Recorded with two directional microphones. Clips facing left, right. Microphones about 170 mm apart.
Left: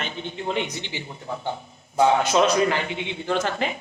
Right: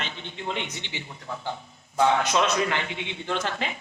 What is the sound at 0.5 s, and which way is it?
Speech, 35° left (ahead or behind).